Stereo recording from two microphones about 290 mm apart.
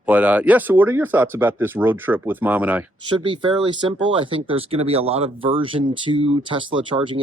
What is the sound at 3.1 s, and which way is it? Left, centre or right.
Speech, centre.